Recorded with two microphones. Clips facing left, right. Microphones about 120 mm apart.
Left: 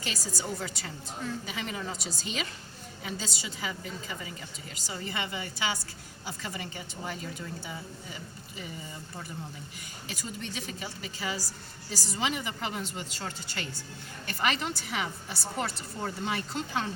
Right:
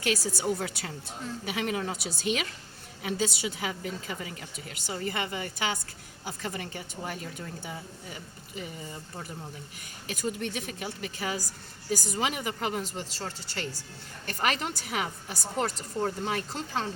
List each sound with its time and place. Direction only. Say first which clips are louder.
0.0 s a woman's voice: right 7 dB; 65° right (ahead or behind)
10.1 s a woman's voice: right 7 dB; 55° right (ahead or behind); by 16.9 s 35° right (ahead or behind)